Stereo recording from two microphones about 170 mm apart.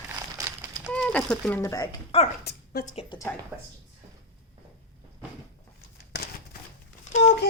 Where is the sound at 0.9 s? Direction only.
5° left (ahead or behind).